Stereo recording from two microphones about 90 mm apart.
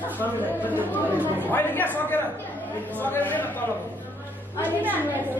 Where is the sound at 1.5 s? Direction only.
20° left (ahead or behind).